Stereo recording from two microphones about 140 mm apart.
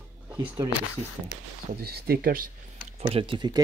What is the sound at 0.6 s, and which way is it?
Speech, 25° right (ahead or behind).